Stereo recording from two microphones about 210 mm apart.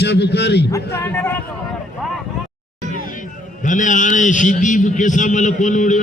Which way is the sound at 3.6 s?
35° left (ahead or behind).